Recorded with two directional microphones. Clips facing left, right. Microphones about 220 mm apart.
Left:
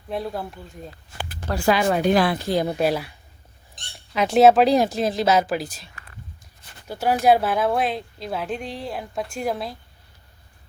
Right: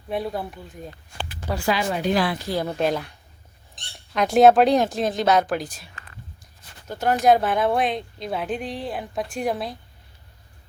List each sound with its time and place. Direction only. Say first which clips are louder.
0.1 s speech: right 1 dB; centre (ahead or behind)
1.6 s speech: left 5 dB; 55° left (ahead or behind)
2.5 s speech: left 2 dB; 15° left (ahead or behind)
6.8 s speech: even; 10° left (ahead or behind)